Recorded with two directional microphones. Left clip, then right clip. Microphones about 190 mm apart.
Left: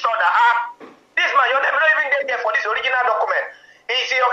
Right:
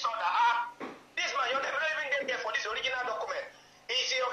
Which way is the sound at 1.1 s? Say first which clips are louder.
Left 15 dB; 30° left (ahead or behind).